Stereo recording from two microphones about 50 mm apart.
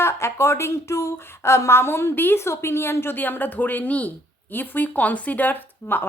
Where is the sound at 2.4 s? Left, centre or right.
Left.